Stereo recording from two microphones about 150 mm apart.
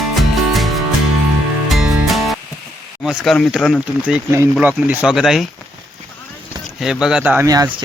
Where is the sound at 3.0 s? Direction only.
Centre (ahead or behind).